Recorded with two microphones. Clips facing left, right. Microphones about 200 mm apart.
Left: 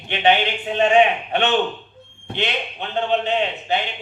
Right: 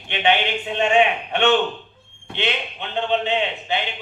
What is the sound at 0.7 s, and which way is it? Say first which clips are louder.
Speech: left 3 dB; 40° left (ahead or behind).